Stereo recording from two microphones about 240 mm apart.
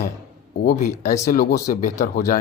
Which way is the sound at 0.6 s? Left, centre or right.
Left.